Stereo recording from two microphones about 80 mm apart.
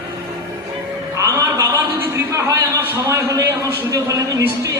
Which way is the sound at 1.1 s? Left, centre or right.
Right.